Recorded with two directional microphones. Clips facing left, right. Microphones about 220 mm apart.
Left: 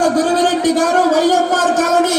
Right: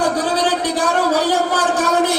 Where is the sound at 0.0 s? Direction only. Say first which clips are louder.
Left 5 dB; 45° left (ahead or behind).